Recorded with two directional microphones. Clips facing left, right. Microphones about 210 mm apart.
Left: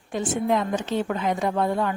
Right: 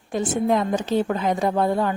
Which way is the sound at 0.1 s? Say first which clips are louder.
Right 2 dB; 40° right (ahead or behind).